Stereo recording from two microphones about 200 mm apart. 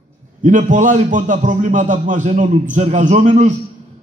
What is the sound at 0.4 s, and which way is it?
A man's voice, 40° right (ahead or behind).